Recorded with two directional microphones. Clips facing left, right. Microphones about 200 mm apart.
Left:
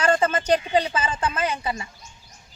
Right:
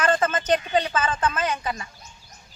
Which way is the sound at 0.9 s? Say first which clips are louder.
Right 1 dB; 10° left (ahead or behind).